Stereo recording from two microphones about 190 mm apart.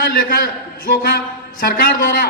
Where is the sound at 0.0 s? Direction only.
55° left (ahead or behind).